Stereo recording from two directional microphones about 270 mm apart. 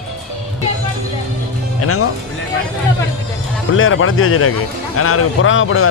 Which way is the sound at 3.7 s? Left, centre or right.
Left.